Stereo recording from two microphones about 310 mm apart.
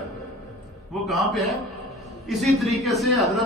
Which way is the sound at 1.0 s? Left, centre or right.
Centre.